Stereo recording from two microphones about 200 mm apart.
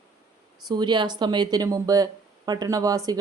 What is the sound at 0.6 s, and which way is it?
Speech, 20° right (ahead or behind).